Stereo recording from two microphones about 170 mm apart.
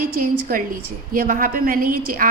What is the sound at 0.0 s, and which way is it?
A woman's voice, 55° right (ahead or behind).